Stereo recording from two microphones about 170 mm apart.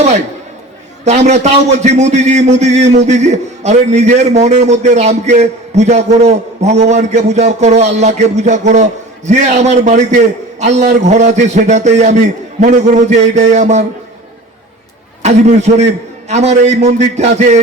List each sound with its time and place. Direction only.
1.0 s a man's voice: 40° right (ahead or behind)
15.2 s a man's voice: 45° right (ahead or behind)